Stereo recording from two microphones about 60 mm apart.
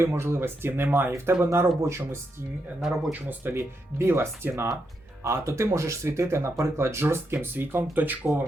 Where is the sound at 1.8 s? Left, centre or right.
Right.